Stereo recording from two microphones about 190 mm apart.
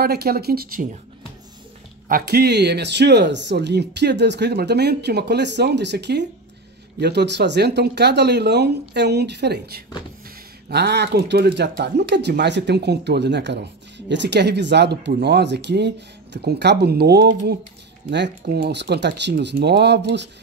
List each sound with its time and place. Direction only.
0.0 s speech: 55° right (ahead or behind)
2.0 s speech: 50° right (ahead or behind)